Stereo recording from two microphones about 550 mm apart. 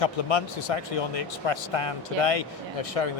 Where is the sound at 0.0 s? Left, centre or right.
Left.